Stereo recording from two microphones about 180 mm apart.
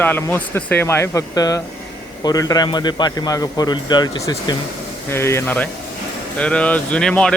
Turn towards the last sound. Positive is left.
turn(degrees=5)  # may be behind; listen again after turning